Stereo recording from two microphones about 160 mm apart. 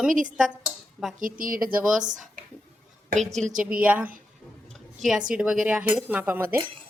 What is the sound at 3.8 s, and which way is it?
Speech, 10° right (ahead or behind).